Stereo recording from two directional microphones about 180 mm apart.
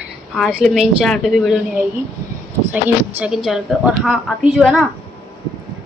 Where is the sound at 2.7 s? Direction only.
5° right (ahead or behind).